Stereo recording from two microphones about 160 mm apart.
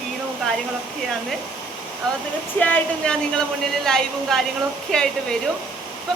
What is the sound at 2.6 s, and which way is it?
A woman's voice, 10° left (ahead or behind).